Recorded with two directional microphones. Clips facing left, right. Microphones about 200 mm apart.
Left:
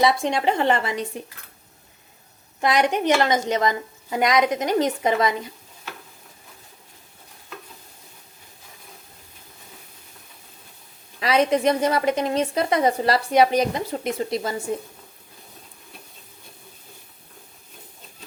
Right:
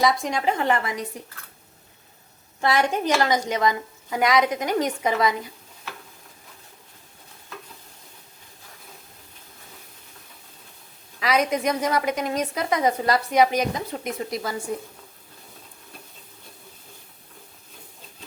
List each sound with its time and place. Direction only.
0.0 s a woman's voice: 30° left (ahead or behind)
2.6 s a woman's voice: 15° left (ahead or behind)
11.2 s a woman's voice: 30° left (ahead or behind)